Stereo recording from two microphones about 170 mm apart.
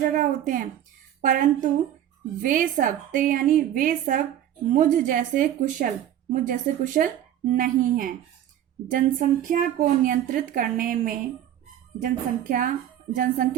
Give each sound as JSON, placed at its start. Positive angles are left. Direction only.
{"t": 0.1, "sound": "a woman's voice", "side_deg": -50}